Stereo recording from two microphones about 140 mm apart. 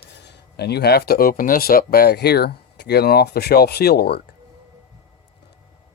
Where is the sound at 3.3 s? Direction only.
90° left.